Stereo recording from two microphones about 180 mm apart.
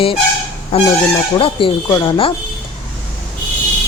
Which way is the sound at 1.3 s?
30° left (ahead or behind).